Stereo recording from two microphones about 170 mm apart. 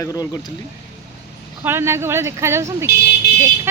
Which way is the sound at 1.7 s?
15° right (ahead or behind).